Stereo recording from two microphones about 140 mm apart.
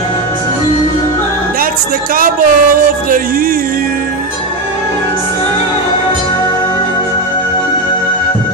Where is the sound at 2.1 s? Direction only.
85° right.